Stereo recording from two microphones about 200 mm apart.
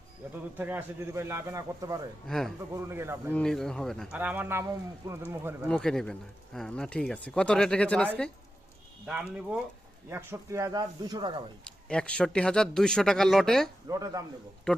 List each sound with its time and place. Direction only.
0.5 s speech: 10° right (ahead or behind)
2.2 s speech: centre (ahead or behind)
2.7 s speech: 15° right (ahead or behind)
3.3 s speech: 5° left (ahead or behind)
5.6 s speech: 5° left (ahead or behind)
9.0 s speech: 5° right (ahead or behind); by 11.4 s 25° right (ahead or behind)
11.6 s speech: 5° left (ahead or behind)
13.8 s speech: 15° right (ahead or behind)
14.7 s speech: 5° left (ahead or behind)